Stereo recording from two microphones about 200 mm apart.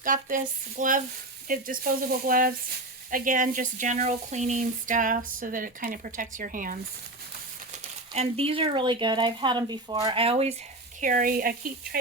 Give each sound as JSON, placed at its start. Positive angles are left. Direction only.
{"t": 0.0, "sound": "speech", "side_deg": -40}
{"t": 7.7, "sound": "speech", "side_deg": -30}
{"t": 11.0, "sound": "speech", "side_deg": -45}